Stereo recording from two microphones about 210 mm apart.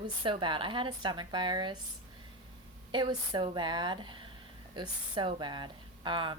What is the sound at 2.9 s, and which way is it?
Speech, 20° right (ahead or behind).